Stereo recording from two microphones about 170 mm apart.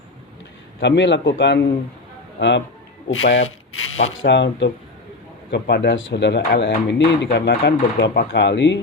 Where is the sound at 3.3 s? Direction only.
40° left (ahead or behind).